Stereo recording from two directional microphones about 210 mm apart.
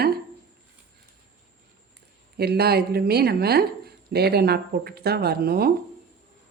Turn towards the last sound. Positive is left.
turn(degrees=-45)  # may be behind; listen again after turning